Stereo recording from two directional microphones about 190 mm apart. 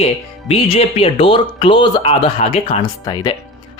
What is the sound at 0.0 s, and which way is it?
Speech, 30° left (ahead or behind).